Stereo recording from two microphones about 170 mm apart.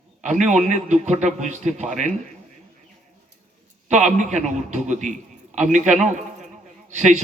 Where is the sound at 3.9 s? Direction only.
45° right (ahead or behind).